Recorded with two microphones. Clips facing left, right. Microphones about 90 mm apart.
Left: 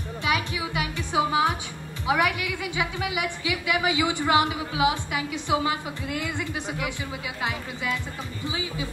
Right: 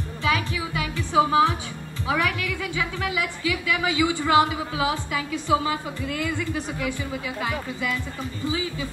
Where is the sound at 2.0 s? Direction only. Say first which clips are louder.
Left 1 dB; 20° left (ahead or behind).